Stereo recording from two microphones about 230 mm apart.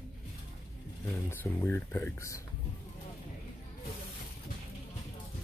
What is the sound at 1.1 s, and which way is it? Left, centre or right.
Speech, centre.